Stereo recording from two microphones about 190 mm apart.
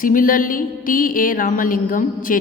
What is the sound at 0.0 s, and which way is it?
A woman's voice, 45° left (ahead or behind).